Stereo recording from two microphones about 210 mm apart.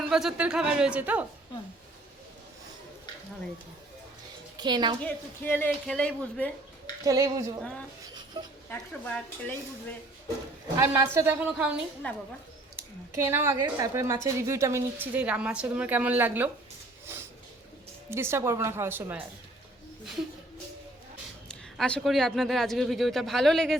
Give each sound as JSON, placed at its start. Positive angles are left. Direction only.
{"t": 0.1, "sound": "speech", "side_deg": 0}
{"t": 4.5, "sound": "a woman's voice", "side_deg": -20}
{"t": 5.0, "sound": "speech", "side_deg": 10}
{"t": 7.0, "sound": "a woman's voice", "side_deg": -15}
{"t": 7.6, "sound": "speech", "side_deg": 5}
{"t": 10.8, "sound": "a woman's voice", "side_deg": -15}
{"t": 12.0, "sound": "speech", "side_deg": 5}
{"t": 13.1, "sound": "a woman's voice", "side_deg": -10}
{"t": 18.1, "sound": "a woman's voice", "side_deg": -10}
{"t": 21.8, "sound": "speech", "side_deg": 5}